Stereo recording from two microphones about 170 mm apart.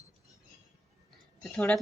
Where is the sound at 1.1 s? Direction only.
5° left (ahead or behind).